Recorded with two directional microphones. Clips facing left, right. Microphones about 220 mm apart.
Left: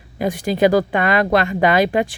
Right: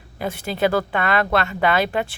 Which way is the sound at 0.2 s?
15° left (ahead or behind).